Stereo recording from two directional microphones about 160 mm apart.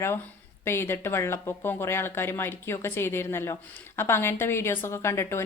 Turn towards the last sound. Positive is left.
turn(degrees=15)  # may be behind; listen again after turning